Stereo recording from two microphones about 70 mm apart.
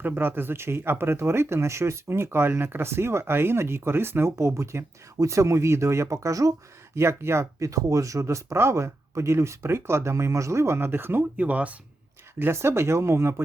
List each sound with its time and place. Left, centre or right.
0.0 s speech: right
6.9 s speech: right
12.4 s speech: right